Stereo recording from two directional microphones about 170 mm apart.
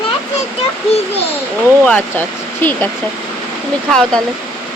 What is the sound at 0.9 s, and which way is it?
Speech, 35° left (ahead or behind).